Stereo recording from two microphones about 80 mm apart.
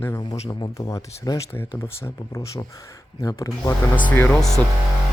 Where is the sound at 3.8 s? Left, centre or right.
Left.